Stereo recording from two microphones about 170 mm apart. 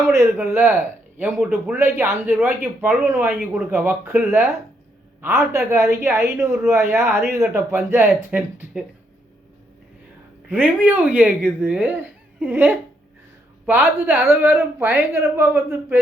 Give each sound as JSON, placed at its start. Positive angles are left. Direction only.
{"t": 0.1, "sound": "speech", "side_deg": -15}
{"t": 10.5, "sound": "speech", "side_deg": -10}